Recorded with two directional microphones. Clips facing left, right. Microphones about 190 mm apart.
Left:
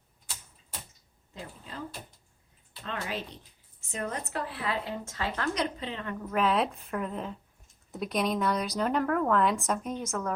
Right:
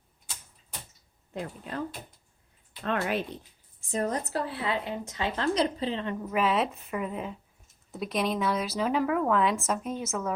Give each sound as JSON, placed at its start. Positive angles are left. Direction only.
{"t": 1.3, "sound": "speech", "side_deg": -65}
{"t": 2.8, "sound": "speech", "side_deg": -60}
{"t": 3.9, "sound": "speech", "side_deg": -35}
{"t": 5.5, "sound": "a woman's voice", "side_deg": -30}
{"t": 6.2, "sound": "a woman's voice", "side_deg": -5}